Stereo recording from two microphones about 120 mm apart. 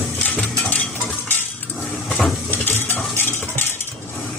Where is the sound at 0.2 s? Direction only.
10° left (ahead or behind).